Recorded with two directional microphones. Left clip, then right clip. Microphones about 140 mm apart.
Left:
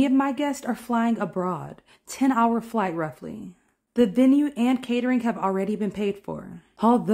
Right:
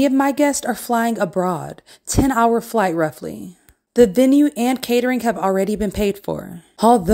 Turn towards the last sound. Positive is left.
turn(degrees=-30)  # may be behind; listen again after turning